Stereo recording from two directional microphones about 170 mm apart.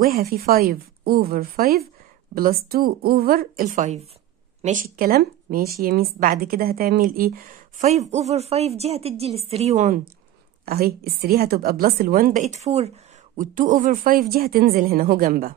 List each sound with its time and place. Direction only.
0.0 s a woman's voice: 60° right (ahead or behind); by 10.0 s 45° right (ahead or behind)
10.6 s a woman's voice: 60° right (ahead or behind); by 12.9 s 40° right (ahead or behind)
13.4 s a woman's voice: 50° right (ahead or behind)